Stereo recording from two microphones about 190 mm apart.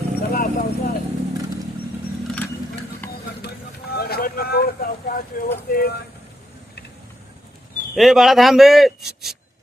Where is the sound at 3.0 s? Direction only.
10° left (ahead or behind).